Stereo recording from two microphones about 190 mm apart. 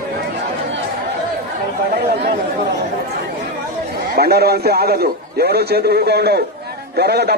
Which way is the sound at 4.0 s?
55° right (ahead or behind).